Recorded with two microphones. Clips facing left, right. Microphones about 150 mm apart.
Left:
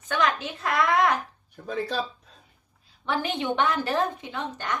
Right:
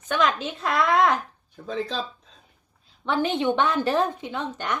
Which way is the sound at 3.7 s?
20° right (ahead or behind).